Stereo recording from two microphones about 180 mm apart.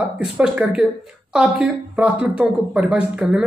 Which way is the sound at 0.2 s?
5° right (ahead or behind).